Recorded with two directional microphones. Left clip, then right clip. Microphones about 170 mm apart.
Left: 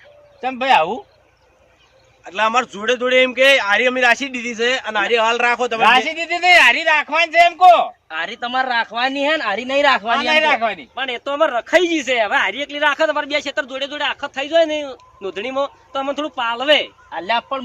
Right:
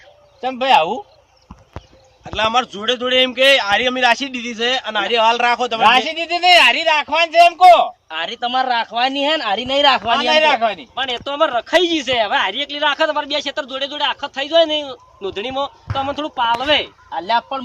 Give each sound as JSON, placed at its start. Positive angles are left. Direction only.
{"t": 0.4, "sound": "speech", "side_deg": -5}
{"t": 2.2, "sound": "a man's voice", "side_deg": 15}
{"t": 6.1, "sound": "speech", "side_deg": -5}
{"t": 10.9, "sound": "a man's voice", "side_deg": 25}
{"t": 17.1, "sound": "a man's voice", "side_deg": 5}